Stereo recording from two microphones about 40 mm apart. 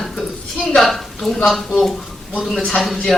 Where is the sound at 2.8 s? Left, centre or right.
Centre.